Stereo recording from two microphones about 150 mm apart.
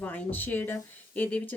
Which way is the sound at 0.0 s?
10° left (ahead or behind).